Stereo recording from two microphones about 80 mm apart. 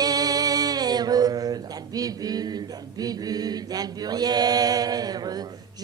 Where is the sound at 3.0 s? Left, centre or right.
Right.